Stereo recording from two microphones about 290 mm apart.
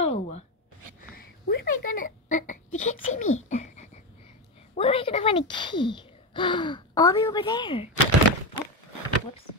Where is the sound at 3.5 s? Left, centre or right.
Left.